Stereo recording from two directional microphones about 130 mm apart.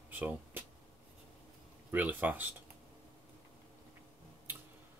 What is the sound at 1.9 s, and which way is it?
Speech, 15° right (ahead or behind).